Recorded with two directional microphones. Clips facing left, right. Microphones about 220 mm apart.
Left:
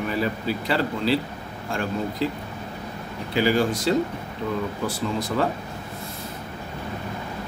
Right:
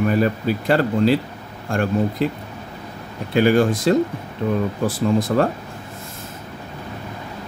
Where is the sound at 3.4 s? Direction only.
55° right (ahead or behind).